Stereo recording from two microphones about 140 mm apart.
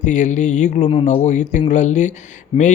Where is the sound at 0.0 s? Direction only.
60° left (ahead or behind).